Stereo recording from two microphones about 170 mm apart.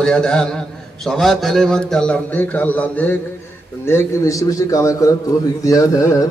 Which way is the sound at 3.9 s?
15° left (ahead or behind).